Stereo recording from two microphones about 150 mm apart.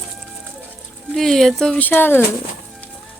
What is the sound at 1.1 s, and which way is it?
Speech, centre (ahead or behind).